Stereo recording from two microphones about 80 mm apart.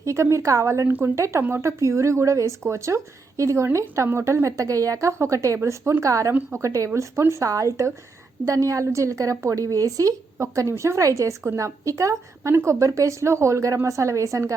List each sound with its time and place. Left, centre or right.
0.0 s a woman's voice: right